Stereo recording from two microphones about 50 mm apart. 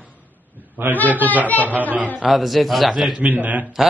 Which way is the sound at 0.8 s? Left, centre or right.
Right.